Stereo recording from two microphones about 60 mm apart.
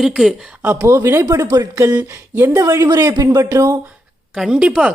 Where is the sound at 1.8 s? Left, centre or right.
Right.